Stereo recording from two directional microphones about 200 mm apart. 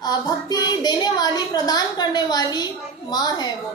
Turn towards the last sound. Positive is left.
turn(degrees=20)  # may be behind; listen again after turning